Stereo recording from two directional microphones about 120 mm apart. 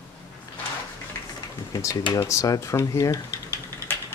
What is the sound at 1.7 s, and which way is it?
Speech, 30° left (ahead or behind).